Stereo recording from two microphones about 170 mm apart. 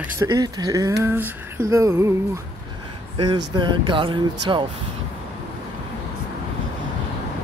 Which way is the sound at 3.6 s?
30° right (ahead or behind).